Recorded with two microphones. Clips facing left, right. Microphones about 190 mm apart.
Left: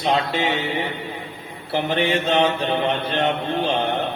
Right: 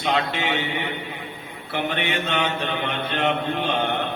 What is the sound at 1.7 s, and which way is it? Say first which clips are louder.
Mantra: left 5 dB; 35° left (ahead or behind).